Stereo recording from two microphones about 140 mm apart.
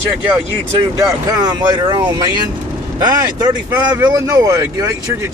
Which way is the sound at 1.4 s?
30° right (ahead or behind).